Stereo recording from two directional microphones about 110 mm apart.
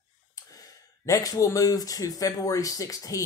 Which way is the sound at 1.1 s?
30° left (ahead or behind).